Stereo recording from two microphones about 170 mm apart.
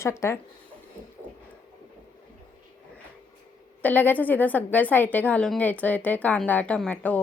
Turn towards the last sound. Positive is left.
turn(degrees=10)  # may be behind; listen again after turning